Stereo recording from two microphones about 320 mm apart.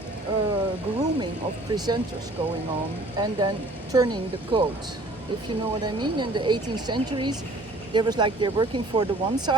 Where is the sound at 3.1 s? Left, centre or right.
Centre.